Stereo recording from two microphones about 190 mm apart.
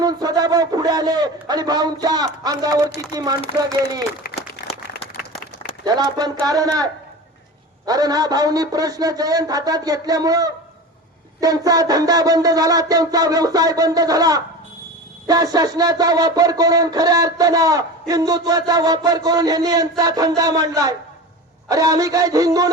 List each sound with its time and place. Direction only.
0.0 s speech: 20° right (ahead or behind)
4.4 s applause: 35° left (ahead or behind)
5.8 s speech: 20° right (ahead or behind)